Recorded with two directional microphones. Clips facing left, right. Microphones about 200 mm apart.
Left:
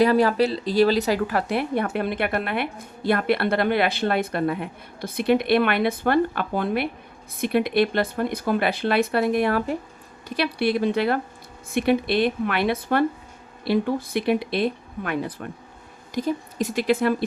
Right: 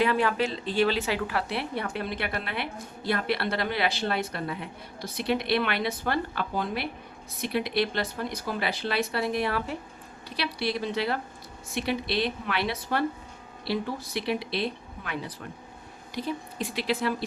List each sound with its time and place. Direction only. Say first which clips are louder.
0.0 s a woman's voice: left 7 dB; 40° left (ahead or behind)